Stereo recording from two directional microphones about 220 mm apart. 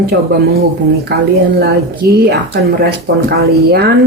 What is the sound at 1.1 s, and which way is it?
Speech, 45° right (ahead or behind).